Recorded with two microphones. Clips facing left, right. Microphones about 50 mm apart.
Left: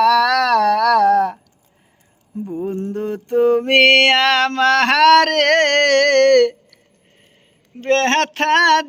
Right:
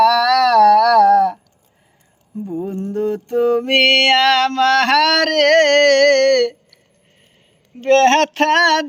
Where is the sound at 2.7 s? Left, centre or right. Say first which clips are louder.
Right 2 dB; left.